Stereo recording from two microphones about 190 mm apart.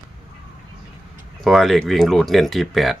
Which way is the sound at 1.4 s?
Centre (ahead or behind).